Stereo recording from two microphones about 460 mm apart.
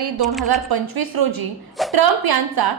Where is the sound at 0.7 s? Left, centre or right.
Right.